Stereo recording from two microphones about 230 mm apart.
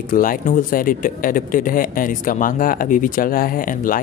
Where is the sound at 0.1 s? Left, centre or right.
Left.